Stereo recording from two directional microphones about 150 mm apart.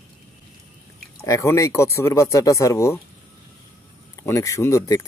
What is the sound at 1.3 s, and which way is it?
Speech, 20° left (ahead or behind).